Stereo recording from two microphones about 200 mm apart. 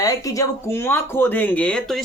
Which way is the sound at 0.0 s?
15° left (ahead or behind).